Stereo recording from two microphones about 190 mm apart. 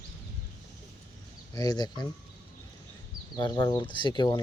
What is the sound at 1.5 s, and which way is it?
Speech, 20° left (ahead or behind).